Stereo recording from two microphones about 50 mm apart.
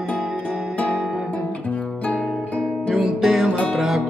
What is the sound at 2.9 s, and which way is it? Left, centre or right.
Music, centre.